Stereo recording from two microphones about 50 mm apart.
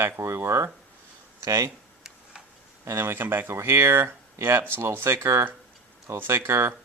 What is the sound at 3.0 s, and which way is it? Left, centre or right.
Speech, right.